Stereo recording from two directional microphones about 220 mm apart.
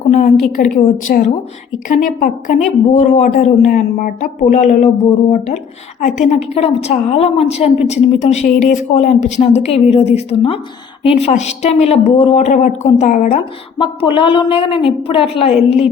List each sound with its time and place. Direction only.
0.1 s a woman's voice: 35° left (ahead or behind)
6.0 s a woman's voice: 35° left (ahead or behind)
13.4 s a woman's voice: 20° left (ahead or behind)